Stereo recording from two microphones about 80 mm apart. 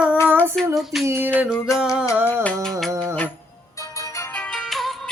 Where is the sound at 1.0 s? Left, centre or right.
Right.